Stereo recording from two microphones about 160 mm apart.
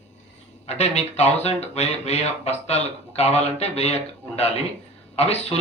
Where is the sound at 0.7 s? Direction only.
45° left (ahead or behind).